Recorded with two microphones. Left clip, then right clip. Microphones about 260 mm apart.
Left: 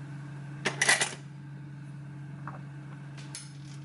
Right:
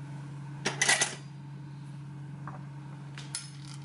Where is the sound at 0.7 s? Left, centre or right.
Centre.